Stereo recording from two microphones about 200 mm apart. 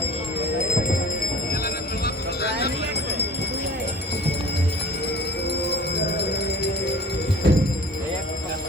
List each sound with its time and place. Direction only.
2.4 s clip-clop: 55° left (ahead or behind)
6.0 s music: 55° left (ahead or behind)
7.4 s music: 55° right (ahead or behind)